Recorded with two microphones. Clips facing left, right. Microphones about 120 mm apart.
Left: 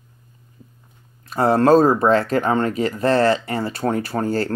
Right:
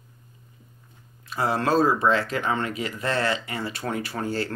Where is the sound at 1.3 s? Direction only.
45° left (ahead or behind).